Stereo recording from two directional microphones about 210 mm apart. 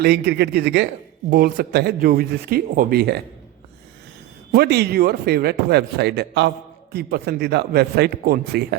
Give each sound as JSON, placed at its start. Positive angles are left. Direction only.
{"t": 0.0, "sound": "speech", "side_deg": -50}
{"t": 4.5, "sound": "speech", "side_deg": -50}